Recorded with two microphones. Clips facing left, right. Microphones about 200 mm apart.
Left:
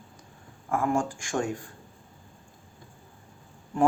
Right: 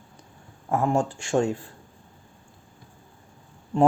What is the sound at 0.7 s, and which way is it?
Speech, 25° right (ahead or behind).